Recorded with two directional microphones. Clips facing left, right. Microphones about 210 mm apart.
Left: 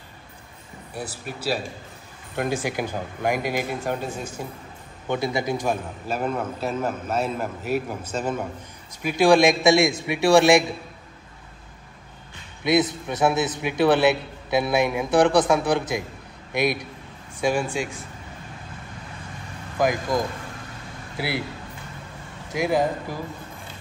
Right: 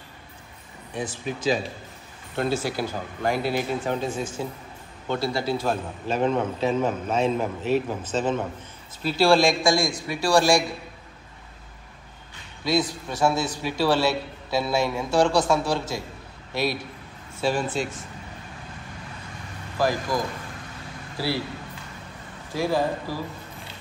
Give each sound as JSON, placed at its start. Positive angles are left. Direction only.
{"t": 0.9, "sound": "a man's voice", "side_deg": 10}
{"t": 12.6, "sound": "a man's voice", "side_deg": 20}
{"t": 19.8, "sound": "a man's voice", "side_deg": 20}
{"t": 22.5, "sound": "a man's voice", "side_deg": 15}